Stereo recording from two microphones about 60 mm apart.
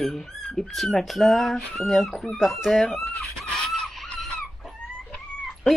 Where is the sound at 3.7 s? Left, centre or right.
Centre.